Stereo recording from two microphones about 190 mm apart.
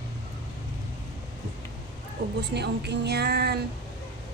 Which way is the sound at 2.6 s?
60° right (ahead or behind).